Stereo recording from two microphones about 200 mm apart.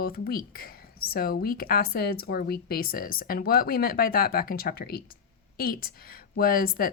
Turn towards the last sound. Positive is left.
turn(degrees=45)  # may be behind; listen again after turning